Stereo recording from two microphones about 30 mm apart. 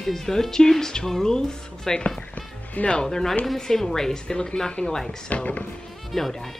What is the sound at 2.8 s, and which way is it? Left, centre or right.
Speech, left.